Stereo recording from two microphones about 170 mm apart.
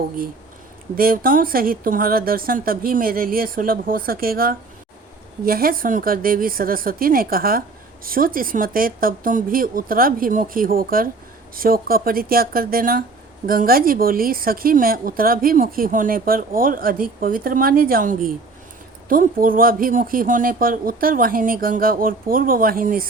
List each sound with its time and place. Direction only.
0.9 s speech: 60° right (ahead or behind)